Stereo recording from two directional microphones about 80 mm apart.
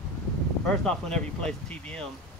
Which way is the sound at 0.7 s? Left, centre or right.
Centre.